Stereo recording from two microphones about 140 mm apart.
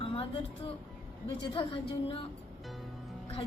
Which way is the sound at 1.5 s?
40° left (ahead or behind).